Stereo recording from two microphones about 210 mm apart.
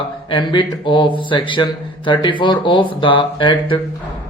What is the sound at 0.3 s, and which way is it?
Speech, 20° left (ahead or behind).